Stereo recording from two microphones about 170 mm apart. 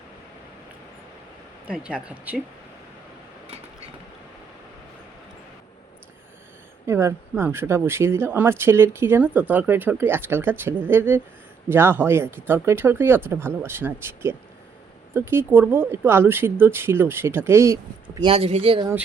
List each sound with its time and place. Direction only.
1.6 s speech: 5° right (ahead or behind)
6.8 s speech: 15° right (ahead or behind)
18.3 s speech: 35° right (ahead or behind)